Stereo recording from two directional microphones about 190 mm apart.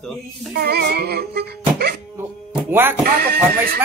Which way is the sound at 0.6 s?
55° right (ahead or behind).